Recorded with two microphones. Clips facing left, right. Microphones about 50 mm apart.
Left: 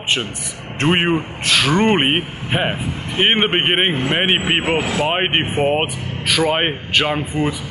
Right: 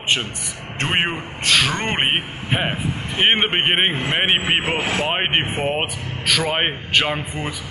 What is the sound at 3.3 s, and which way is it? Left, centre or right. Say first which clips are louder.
Speech: left 2 dB; centre.